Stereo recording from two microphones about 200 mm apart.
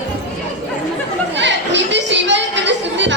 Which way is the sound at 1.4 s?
65° right (ahead or behind).